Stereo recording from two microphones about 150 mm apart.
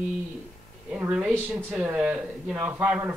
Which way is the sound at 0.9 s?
10° right (ahead or behind).